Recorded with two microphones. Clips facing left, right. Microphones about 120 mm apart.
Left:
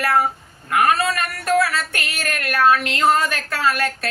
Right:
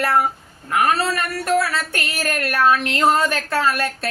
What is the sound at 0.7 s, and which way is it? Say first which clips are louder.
Speech: left 1 dB; 25° right (ahead or behind).